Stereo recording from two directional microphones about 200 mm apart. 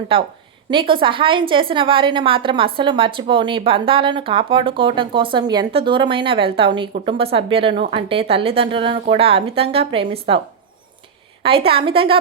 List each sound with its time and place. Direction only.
0.1 s a woman's voice: 25° right (ahead or behind)
11.4 s a woman's voice: 30° right (ahead or behind)